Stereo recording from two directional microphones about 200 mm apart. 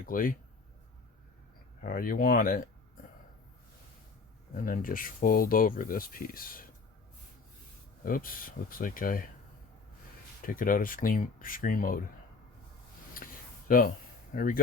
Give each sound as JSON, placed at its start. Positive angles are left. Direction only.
{"t": 0.0, "sound": "speech", "side_deg": 45}
{"t": 1.8, "sound": "speech", "side_deg": 45}
{"t": 4.5, "sound": "speech", "side_deg": 40}
{"t": 8.0, "sound": "speech", "side_deg": 45}
{"t": 10.4, "sound": "speech", "side_deg": 45}
{"t": 13.7, "sound": "speech", "side_deg": 45}